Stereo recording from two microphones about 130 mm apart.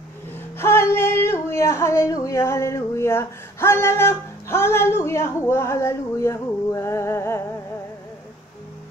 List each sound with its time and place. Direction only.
0.3 s female singing: 20° left (ahead or behind)